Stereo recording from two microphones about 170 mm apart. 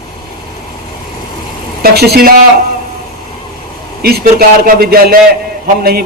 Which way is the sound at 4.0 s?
65° right (ahead or behind).